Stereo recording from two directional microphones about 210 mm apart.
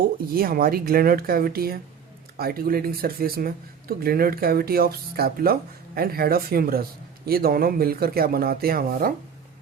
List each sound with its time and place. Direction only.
0.3 s speech: 45° right (ahead or behind)